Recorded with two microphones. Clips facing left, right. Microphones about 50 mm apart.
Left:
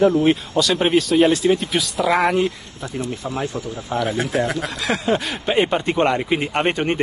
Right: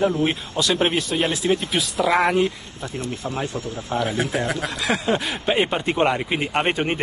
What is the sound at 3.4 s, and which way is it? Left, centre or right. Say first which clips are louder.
Speech: left 2 dB; left.